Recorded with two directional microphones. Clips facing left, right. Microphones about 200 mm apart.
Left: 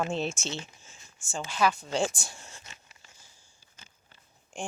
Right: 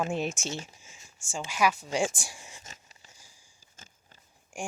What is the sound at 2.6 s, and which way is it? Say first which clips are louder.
Zipper: right 2 dB; 40° right (ahead or behind).